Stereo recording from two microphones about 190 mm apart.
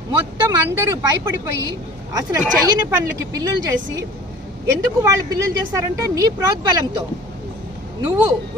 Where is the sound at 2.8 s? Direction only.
20° right (ahead or behind).